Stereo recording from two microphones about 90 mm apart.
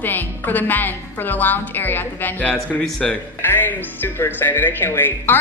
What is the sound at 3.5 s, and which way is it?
A woman's voice, 20° left (ahead or behind).